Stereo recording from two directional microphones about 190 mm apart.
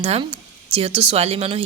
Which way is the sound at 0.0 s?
30° right (ahead or behind).